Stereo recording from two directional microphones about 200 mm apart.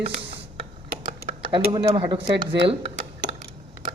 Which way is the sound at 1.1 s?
30° right (ahead or behind).